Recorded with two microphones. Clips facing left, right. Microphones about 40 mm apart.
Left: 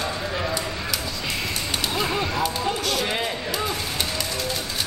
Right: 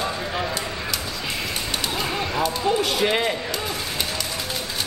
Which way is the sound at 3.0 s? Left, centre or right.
Right.